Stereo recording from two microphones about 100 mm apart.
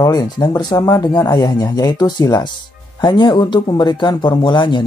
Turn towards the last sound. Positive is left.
turn(degrees=50)  # may be behind; listen again after turning